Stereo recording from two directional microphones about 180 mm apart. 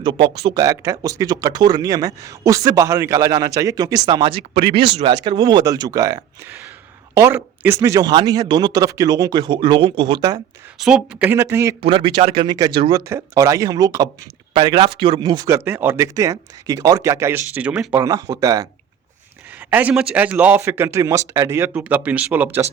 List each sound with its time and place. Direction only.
0.0 s speech: 25° right (ahead or behind)
10.8 s speech: 5° right (ahead or behind)
11.8 s speech: 30° right (ahead or behind); by 22.6 s 10° right (ahead or behind)